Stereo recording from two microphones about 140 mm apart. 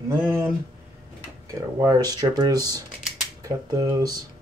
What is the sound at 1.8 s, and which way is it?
Speech, 30° right (ahead or behind).